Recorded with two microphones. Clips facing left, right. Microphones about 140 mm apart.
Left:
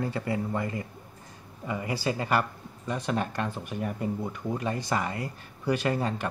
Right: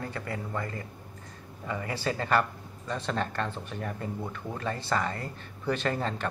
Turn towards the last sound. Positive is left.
turn(degrees=10)  # may be behind; listen again after turning